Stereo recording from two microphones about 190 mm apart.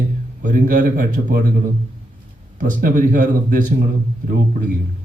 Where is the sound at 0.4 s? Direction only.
45° right (ahead or behind).